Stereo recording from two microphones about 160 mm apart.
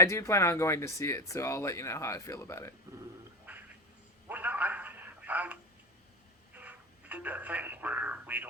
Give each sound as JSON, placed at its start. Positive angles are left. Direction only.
{"t": 0.0, "sound": "speech", "side_deg": 20}
{"t": 3.5, "sound": "a sound", "side_deg": -10}
{"t": 4.3, "sound": "telephone", "side_deg": -10}
{"t": 6.6, "sound": "telephone", "side_deg": -10}